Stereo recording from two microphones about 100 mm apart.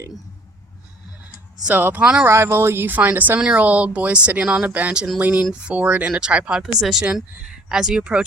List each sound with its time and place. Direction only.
1.6 s speech: 15° right (ahead or behind)
2.2 s speech: 25° right (ahead or behind); by 8.2 s 10° right (ahead or behind)